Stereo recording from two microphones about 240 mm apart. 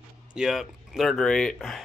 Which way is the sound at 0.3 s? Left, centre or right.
Centre.